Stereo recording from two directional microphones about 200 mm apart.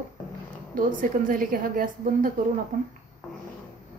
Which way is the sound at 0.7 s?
40° right (ahead or behind).